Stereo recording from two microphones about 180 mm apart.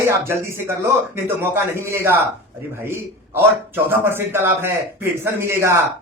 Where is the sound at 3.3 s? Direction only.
10° right (ahead or behind).